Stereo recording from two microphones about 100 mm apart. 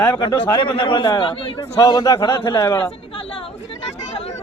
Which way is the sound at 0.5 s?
55° left (ahead or behind).